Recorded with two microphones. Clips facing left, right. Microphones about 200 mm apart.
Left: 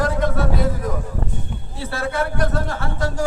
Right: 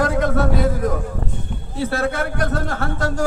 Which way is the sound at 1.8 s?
45° right (ahead or behind).